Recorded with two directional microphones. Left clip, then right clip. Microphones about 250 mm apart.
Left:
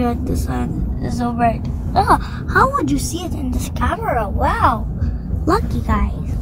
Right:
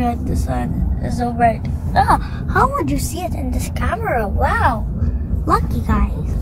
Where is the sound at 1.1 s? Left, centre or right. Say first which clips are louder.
Right 2 dB; centre.